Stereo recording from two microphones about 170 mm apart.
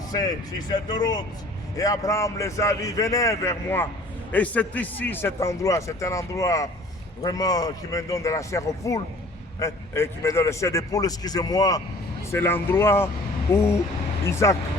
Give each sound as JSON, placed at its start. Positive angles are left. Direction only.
{"t": 0.1, "sound": "a man's voice", "side_deg": 20}